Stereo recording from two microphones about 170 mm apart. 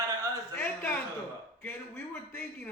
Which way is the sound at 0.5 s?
15° left (ahead or behind).